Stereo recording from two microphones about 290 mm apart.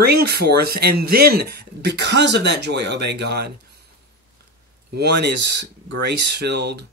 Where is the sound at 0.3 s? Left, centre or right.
Right.